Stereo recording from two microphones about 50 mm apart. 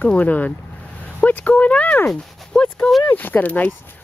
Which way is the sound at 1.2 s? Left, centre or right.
Left.